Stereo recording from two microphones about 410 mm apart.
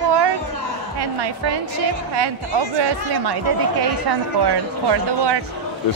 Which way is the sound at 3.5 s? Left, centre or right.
Right.